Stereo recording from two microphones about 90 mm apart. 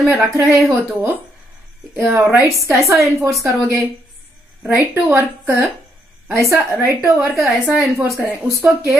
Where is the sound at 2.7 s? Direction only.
35° right (ahead or behind).